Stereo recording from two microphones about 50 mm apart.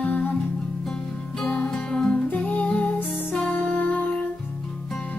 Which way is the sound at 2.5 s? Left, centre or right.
Left.